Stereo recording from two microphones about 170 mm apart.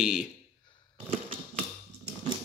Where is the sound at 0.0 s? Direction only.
5° right (ahead or behind).